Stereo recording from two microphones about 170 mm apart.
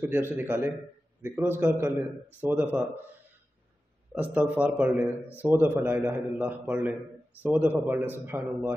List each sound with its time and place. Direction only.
0.0 s a man's voice: 15° right (ahead or behind)
4.1 s a man's voice: 10° right (ahead or behind)